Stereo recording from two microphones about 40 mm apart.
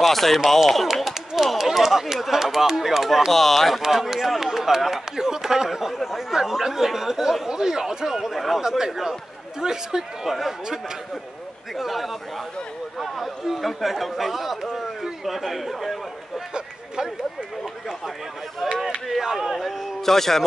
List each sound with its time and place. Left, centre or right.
0.0 s speech: centre
3.8 s speech: centre
16.5 s a sound: centre
18.6 s a sound: centre
19.0 s speech: centre
19.5 s speech: centre